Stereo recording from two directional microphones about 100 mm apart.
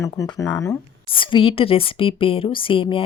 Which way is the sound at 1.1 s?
55° left (ahead or behind).